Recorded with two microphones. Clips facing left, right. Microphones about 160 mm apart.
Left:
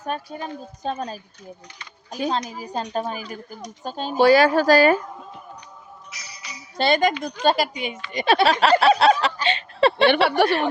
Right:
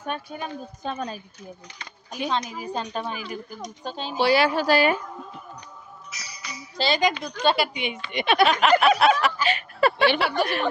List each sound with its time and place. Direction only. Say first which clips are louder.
0.0 s a woman's voice: left 2 dB; 35° left (ahead or behind)
6.7 s a woman's voice: left 4 dB; 55° left (ahead or behind); by 8.0 s 40° left (ahead or behind)
8.1 s a sound: left 2 dB; 35° left (ahead or behind)
10.2 s speech: left 6 dB; 65° left (ahead or behind)